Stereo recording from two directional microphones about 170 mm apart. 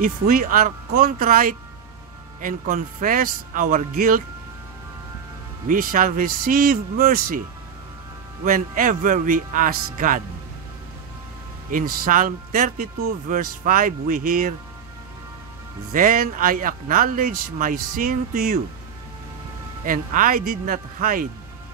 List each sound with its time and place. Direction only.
0.0 s a man's voice: 55° right (ahead or behind)
5.7 s a man's voice: 55° right (ahead or behind)
8.5 s speech: 50° right (ahead or behind)
11.7 s speech: 55° right (ahead or behind)
15.9 s speech: 50° right (ahead or behind)
19.8 s speech: 50° right (ahead or behind)